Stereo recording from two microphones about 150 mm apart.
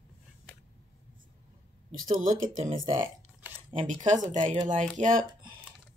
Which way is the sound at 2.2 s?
55° right (ahead or behind).